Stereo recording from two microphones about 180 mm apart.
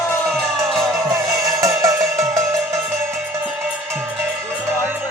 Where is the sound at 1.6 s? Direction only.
15° right (ahead or behind).